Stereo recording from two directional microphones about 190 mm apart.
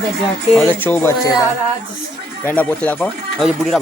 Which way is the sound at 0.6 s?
10° left (ahead or behind).